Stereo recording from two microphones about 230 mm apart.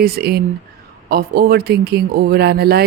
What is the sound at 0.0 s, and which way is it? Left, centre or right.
Speech, right.